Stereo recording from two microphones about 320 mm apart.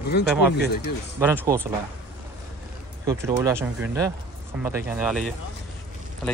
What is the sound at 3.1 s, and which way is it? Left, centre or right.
Speech, centre.